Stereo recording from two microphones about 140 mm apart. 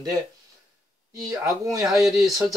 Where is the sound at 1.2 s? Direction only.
20° right (ahead or behind).